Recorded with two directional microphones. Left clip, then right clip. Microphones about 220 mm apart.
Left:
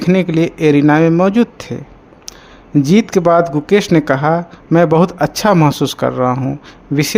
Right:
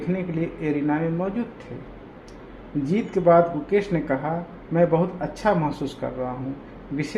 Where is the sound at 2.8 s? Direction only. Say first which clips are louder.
Left 11 dB; 45° left (ahead or behind).